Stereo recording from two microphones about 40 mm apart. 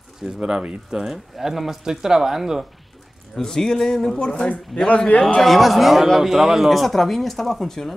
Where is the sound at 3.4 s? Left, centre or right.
Centre.